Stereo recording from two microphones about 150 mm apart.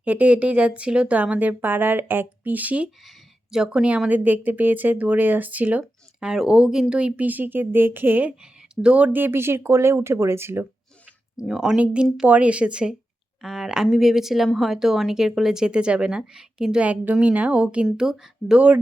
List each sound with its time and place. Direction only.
0.0 s speech: 10° right (ahead or behind)
11.3 s a woman's voice: 5° right (ahead or behind)